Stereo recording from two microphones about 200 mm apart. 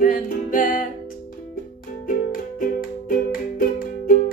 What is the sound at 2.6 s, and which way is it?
Music, 45° left (ahead or behind).